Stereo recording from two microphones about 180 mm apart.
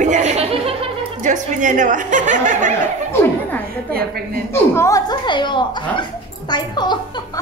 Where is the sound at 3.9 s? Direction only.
55° right (ahead or behind).